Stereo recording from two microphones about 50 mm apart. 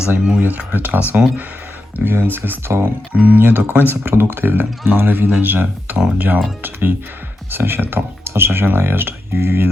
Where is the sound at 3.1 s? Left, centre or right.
Right.